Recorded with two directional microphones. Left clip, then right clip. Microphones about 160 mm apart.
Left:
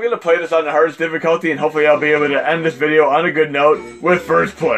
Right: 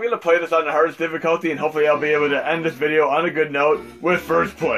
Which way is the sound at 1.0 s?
45° left (ahead or behind).